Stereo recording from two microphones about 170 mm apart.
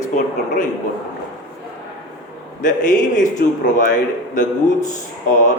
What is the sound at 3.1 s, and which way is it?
Speech, 50° left (ahead or behind).